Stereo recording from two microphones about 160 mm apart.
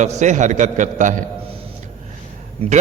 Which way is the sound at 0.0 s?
50° right (ahead or behind).